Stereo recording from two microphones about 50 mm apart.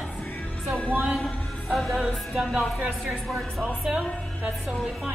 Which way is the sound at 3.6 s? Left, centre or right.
Right.